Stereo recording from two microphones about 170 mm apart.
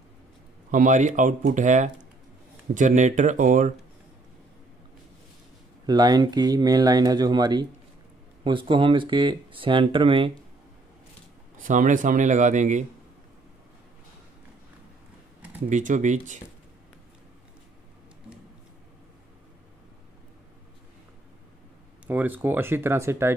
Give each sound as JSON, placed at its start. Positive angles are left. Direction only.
{"t": 0.7, "sound": "speech", "side_deg": -50}
{"t": 5.9, "sound": "speech", "side_deg": -25}
{"t": 11.6, "sound": "speech", "side_deg": -50}
{"t": 15.7, "sound": "speech", "side_deg": -50}
{"t": 22.0, "sound": "speech", "side_deg": -10}